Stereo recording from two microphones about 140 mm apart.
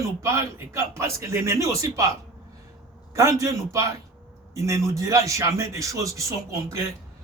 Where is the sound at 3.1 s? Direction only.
20° right (ahead or behind).